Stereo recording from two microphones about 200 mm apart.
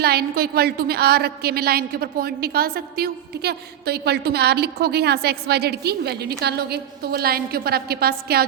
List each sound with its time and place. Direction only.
0.0 s a woman's voice: 50° right (ahead or behind)